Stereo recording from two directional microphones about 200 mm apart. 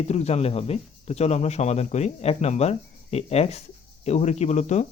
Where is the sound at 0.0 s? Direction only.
30° left (ahead or behind).